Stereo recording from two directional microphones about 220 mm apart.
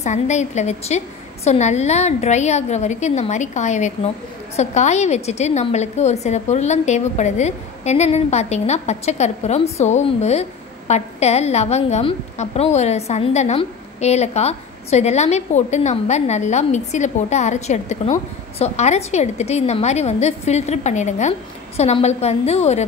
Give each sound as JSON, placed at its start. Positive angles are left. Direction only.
{"t": 0.0, "sound": "a woman's voice", "side_deg": 30}